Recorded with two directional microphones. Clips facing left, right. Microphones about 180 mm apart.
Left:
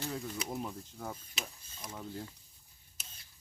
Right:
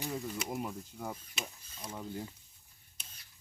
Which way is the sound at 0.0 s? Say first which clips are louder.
Right 1 dB; 5° right (ahead or behind).